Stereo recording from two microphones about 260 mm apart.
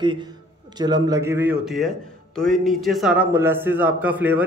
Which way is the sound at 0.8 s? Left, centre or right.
Centre.